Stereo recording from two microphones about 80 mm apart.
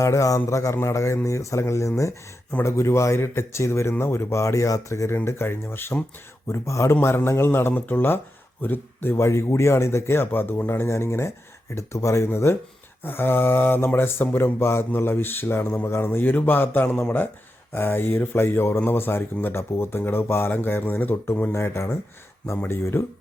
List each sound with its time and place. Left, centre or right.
0.0 s speech: left